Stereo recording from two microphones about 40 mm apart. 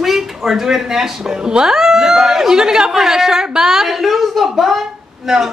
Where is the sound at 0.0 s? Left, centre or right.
Centre.